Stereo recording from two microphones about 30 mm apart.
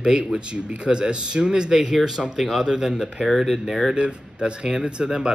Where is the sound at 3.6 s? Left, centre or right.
Right.